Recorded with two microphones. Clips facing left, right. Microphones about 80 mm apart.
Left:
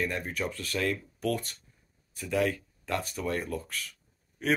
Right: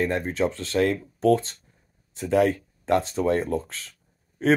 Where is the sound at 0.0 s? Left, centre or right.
Right.